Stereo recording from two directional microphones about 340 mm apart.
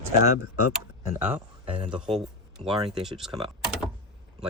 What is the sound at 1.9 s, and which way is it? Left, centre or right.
Speech, centre.